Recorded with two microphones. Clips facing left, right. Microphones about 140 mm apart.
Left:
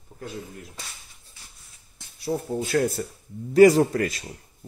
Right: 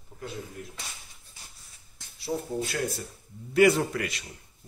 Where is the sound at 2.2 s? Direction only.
45° left (ahead or behind).